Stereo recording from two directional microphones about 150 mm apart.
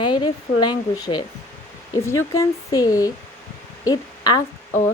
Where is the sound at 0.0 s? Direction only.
30° left (ahead or behind).